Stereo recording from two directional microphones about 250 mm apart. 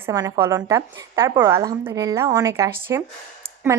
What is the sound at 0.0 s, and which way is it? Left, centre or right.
Speech, centre.